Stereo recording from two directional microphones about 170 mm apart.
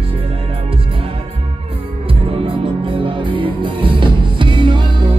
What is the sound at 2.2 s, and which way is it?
Music, 35° right (ahead or behind).